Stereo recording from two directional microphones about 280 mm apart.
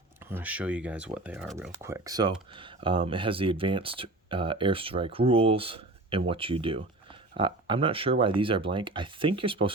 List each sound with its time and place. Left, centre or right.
0.3 s speech: centre